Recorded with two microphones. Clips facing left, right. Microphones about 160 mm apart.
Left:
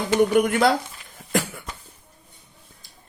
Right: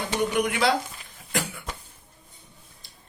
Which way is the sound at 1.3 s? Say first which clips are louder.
Left 5 dB; 50° left (ahead or behind).